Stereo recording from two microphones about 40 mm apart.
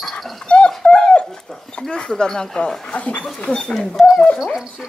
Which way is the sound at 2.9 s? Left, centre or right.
Left.